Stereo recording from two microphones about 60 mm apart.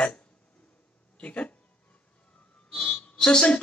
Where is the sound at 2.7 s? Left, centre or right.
Centre.